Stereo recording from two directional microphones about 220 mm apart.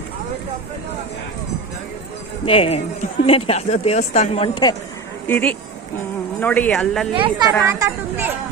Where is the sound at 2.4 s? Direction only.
25° left (ahead or behind).